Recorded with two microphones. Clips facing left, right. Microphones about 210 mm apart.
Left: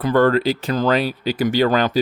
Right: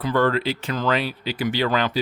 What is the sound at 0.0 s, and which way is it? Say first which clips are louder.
Speech: left 5 dB; 50° left (ahead or behind).